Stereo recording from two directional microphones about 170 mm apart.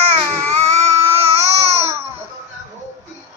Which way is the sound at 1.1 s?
35° right (ahead or behind).